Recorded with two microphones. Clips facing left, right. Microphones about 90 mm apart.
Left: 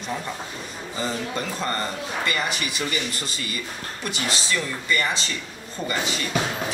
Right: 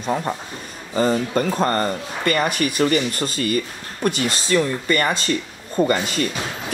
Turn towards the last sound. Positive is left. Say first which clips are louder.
# right 8 dB
turn(degrees=-50)  # may be behind; listen again after turning